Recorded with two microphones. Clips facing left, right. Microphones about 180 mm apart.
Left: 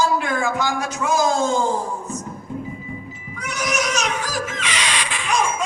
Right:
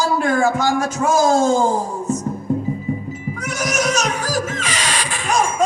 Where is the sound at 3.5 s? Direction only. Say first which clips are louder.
Right 3 dB; 45° right (ahead or behind).